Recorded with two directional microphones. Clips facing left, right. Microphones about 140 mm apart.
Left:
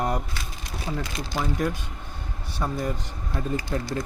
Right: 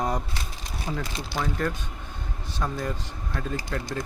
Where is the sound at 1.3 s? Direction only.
10° left (ahead or behind).